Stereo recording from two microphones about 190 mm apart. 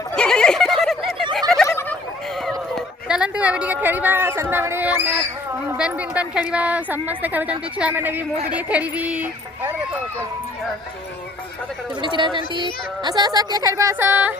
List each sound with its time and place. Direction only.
0.2 s a sound: 5° left (ahead or behind)
1.6 s turkey: 10° left (ahead or behind); by 5.1 s 10° right (ahead or behind)
5.7 s a woman's voice: 5° right (ahead or behind)
11.9 s speech: 25° right (ahead or behind)